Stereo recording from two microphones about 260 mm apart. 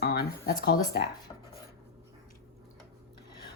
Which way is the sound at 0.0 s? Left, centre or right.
Left.